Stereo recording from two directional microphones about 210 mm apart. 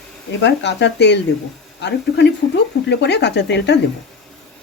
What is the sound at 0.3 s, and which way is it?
Speech, 60° left (ahead or behind).